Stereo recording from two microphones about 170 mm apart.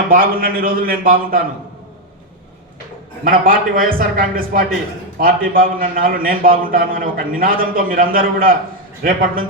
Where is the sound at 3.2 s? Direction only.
55° right (ahead or behind).